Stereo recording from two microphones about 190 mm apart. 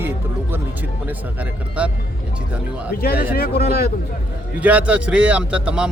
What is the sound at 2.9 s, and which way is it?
Speech, 50° left (ahead or behind).